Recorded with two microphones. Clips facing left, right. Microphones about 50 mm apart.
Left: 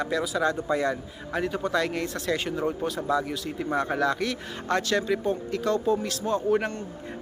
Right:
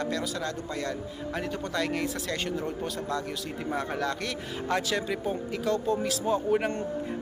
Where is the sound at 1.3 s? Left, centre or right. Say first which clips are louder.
Left 6 dB; centre.